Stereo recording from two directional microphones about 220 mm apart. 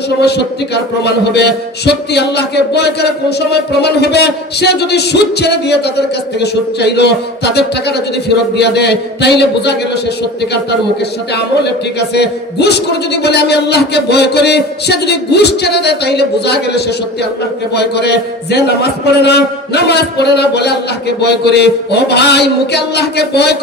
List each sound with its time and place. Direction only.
1.0 s a man's voice: 50° left (ahead or behind)
8.5 s a man's voice: 50° left (ahead or behind)
11.3 s a man's voice: 50° left (ahead or behind)